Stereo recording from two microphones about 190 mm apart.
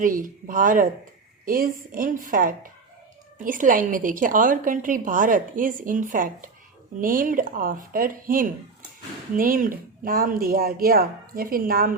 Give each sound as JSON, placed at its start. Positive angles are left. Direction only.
{"t": 0.0, "sound": "a woman's voice", "side_deg": -45}